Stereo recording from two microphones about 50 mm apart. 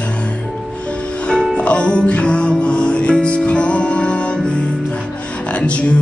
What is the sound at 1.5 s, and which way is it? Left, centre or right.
Music, left.